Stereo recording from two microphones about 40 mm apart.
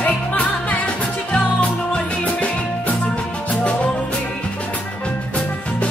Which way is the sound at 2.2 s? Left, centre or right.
Left.